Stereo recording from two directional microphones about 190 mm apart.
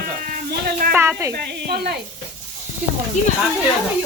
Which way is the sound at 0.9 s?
15° right (ahead or behind).